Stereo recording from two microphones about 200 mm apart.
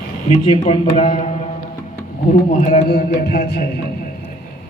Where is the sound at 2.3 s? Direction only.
40° left (ahead or behind).